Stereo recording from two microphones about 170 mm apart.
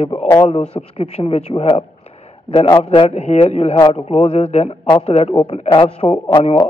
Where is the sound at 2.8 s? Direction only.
35° left (ahead or behind).